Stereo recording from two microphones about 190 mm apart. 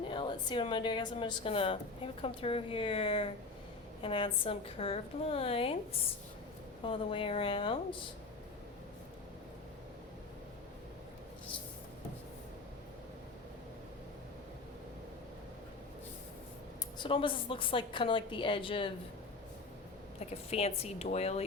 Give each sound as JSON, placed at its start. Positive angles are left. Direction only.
{"t": 0.1, "sound": "a woman's voice", "side_deg": 25}
{"t": 17.0, "sound": "a woman's voice", "side_deg": 30}
{"t": 20.1, "sound": "speech", "side_deg": 30}